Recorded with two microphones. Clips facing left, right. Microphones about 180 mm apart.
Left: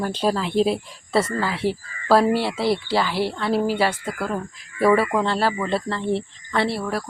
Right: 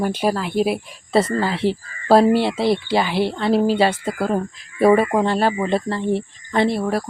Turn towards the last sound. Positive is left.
turn(degrees=-20)  # may be behind; listen again after turning